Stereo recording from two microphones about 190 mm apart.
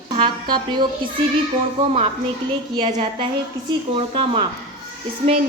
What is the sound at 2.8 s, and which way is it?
Speech, 30° right (ahead or behind).